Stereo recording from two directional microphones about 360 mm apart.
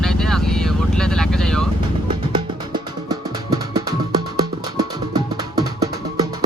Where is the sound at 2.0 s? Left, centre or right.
Centre.